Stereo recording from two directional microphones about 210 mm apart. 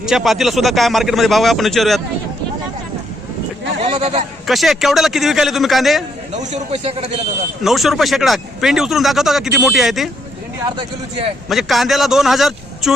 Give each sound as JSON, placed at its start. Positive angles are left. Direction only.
{"t": 0.0, "sound": "speech", "side_deg": 0}
{"t": 3.8, "sound": "sheep", "side_deg": -30}
{"t": 4.4, "sound": "speech", "side_deg": 0}
{"t": 6.3, "sound": "a man's voice", "side_deg": -35}
{"t": 7.6, "sound": "speech", "side_deg": 0}
{"t": 10.8, "sound": "a man's voice", "side_deg": -25}
{"t": 11.4, "sound": "speech", "side_deg": 0}